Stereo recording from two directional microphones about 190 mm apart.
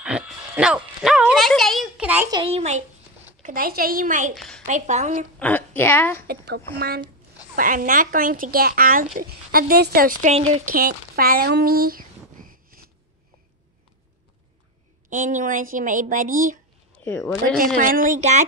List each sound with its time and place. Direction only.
0.0 s a sound: 5° right (ahead or behind)
2.4 s a woman's voice: 35° right (ahead or behind)
3.4 s speech: 50° right (ahead or behind)
4.4 s a sound: 5° left (ahead or behind)
4.6 s a woman's voice: 40° right (ahead or behind)
5.4 s speech: 10° left (ahead or behind)
6.2 s speech: 60° right (ahead or behind)
7.5 s speech: 45° right (ahead or behind)
10.3 s a woman's voice: 35° right (ahead or behind)
10.7 s a sound: 50° right (ahead or behind)
15.0 s speech: 45° right (ahead or behind)
16.9 s a sound: 15° left (ahead or behind)
17.2 s speech: centre (ahead or behind)
17.7 s speech: 45° right (ahead or behind)